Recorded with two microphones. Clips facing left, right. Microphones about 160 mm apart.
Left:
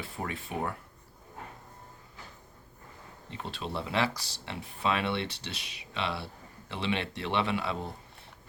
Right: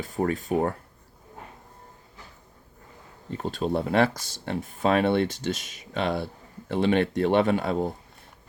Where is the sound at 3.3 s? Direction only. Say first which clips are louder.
Right 10 dB; 45° right (ahead or behind).